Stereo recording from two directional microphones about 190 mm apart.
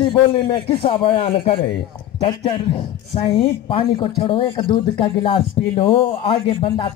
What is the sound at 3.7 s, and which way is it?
A man's voice, 30° left (ahead or behind).